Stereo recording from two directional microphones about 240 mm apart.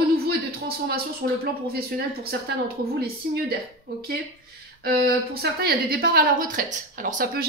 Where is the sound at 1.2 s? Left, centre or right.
Right.